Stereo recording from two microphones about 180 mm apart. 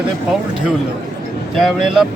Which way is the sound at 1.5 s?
Centre (ahead or behind).